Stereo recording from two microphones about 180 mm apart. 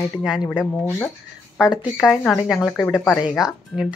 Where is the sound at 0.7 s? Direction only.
10° left (ahead or behind).